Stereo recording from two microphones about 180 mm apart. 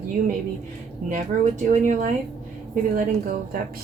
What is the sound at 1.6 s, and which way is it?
Speech, 40° right (ahead or behind).